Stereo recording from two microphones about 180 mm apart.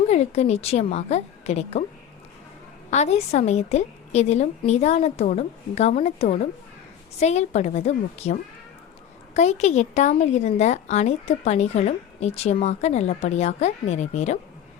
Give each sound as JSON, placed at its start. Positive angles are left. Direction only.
{"t": 0.1, "sound": "speech", "side_deg": 35}
{"t": 2.9, "sound": "speech", "side_deg": 40}